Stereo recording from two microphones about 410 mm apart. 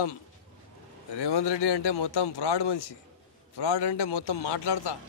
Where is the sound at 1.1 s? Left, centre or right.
Left.